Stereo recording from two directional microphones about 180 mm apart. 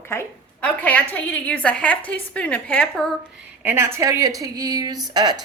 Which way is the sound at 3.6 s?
15° right (ahead or behind).